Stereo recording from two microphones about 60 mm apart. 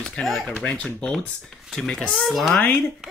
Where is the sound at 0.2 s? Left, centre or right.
Centre.